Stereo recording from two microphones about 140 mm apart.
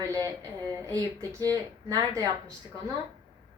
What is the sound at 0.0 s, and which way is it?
A woman's voice, 25° right (ahead or behind).